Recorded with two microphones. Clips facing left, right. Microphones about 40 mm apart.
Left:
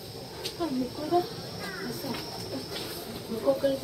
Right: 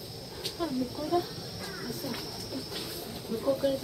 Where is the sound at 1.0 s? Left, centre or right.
Centre.